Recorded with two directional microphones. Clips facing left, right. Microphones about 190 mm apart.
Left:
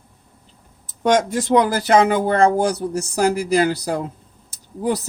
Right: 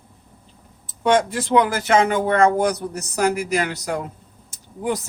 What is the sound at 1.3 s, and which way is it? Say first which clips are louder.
Speech: left 2 dB; 40° left (ahead or behind).